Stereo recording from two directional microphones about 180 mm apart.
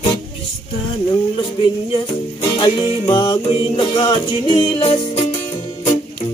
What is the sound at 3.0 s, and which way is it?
Music, 20° left (ahead or behind).